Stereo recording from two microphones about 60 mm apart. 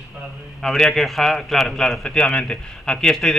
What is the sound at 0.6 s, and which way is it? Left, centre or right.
A man's voice, centre.